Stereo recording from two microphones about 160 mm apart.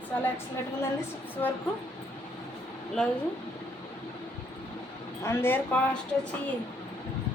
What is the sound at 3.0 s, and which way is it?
Speech, 5° left (ahead or behind).